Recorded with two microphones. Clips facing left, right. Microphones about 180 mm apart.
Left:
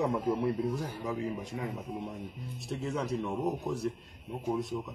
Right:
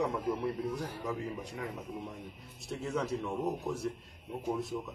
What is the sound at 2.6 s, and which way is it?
Speech, centre (ahead or behind).